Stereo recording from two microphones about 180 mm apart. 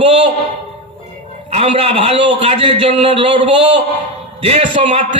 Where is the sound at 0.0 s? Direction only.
30° right (ahead or behind).